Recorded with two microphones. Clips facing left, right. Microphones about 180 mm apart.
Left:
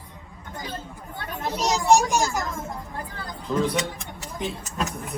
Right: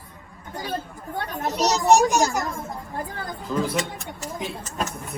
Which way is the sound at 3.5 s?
Centre (ahead or behind).